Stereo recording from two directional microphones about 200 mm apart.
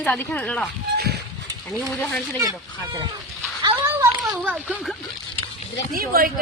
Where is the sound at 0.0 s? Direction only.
5° left (ahead or behind).